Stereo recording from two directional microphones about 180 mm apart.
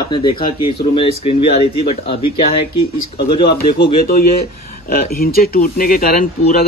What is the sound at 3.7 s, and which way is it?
Speech, 60° left (ahead or behind).